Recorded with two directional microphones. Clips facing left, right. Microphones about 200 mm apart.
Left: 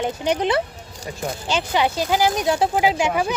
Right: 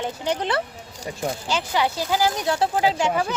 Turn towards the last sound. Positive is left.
turn(degrees=15)  # may be behind; listen again after turning